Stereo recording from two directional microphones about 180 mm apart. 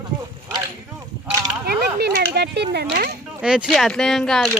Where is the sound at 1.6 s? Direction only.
60° right (ahead or behind).